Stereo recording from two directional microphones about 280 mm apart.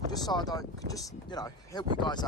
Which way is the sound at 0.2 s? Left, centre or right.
Centre.